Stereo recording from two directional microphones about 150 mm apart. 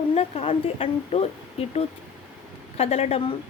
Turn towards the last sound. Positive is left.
turn(degrees=45)  # may be behind; listen again after turning